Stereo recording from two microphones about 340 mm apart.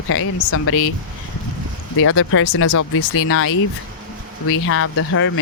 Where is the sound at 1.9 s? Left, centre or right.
Left.